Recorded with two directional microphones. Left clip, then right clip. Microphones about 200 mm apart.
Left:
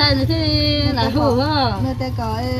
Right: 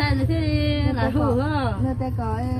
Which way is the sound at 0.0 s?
20° right (ahead or behind).